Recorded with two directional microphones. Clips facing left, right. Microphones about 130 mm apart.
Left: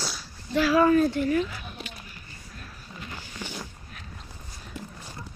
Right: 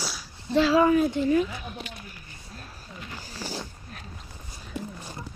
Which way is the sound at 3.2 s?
35° right (ahead or behind).